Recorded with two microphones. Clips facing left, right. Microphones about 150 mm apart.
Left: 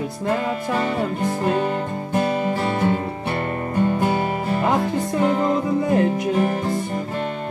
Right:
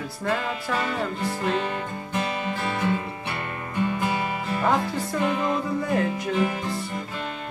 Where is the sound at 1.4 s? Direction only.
40° left (ahead or behind).